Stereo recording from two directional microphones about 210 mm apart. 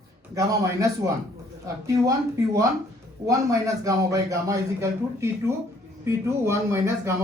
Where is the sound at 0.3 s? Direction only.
15° right (ahead or behind).